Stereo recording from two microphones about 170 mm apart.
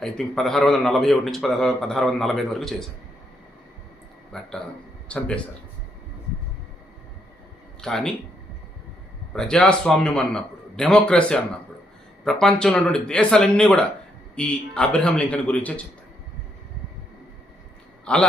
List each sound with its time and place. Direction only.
0.0 s a man's voice: 5° left (ahead or behind)
4.3 s a man's voice: 5° left (ahead or behind)
7.8 s speech: 5° left (ahead or behind)
9.3 s a man's voice: 5° left (ahead or behind)
18.0 s a man's voice: 5° left (ahead or behind)